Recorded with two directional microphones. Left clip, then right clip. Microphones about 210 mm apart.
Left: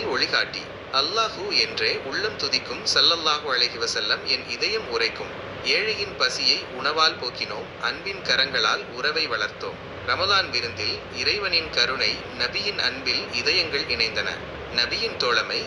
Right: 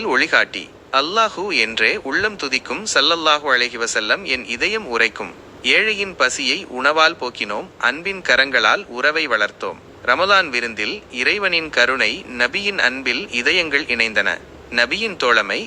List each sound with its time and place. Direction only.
0.0 s a man's voice: 55° right (ahead or behind)